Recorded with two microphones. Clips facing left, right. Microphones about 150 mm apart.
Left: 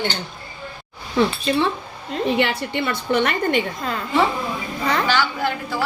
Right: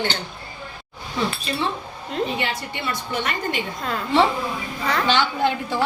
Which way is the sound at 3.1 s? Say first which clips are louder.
Left 8 dB; 60° left (ahead or behind).